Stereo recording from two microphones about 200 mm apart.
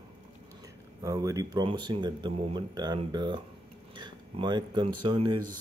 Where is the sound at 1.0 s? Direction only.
15° right (ahead or behind).